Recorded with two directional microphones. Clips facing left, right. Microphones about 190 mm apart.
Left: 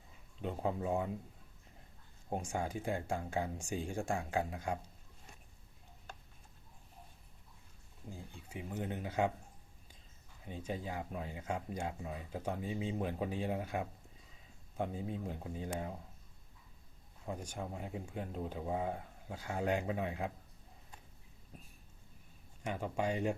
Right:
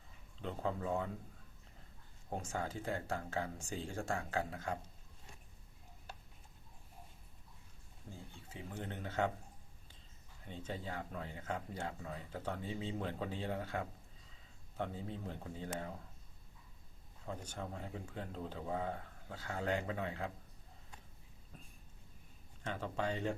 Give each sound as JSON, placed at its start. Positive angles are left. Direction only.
{"t": 0.4, "sound": "speech", "side_deg": 15}
{"t": 2.3, "sound": "speech", "side_deg": 15}
{"t": 8.4, "sound": "speech", "side_deg": 15}
{"t": 10.4, "sound": "speech", "side_deg": 10}
{"t": 17.2, "sound": "speech", "side_deg": 10}
{"t": 22.6, "sound": "speech", "side_deg": 15}